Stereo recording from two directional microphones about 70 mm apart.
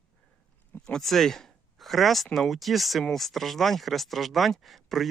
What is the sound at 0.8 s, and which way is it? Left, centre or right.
Speech, centre.